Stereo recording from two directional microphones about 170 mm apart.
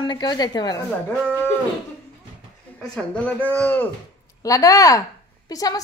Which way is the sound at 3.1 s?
10° left (ahead or behind).